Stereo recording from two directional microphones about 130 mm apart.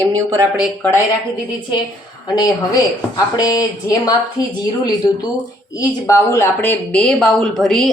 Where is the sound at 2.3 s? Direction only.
30° left (ahead or behind).